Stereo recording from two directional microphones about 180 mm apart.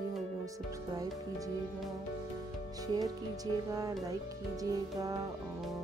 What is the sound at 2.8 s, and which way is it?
Speech, 20° right (ahead or behind).